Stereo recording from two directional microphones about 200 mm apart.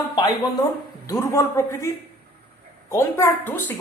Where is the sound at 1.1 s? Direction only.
15° left (ahead or behind).